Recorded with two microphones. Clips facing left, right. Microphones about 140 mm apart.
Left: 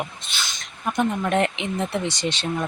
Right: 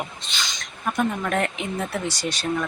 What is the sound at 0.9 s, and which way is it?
Speech, 25° left (ahead or behind).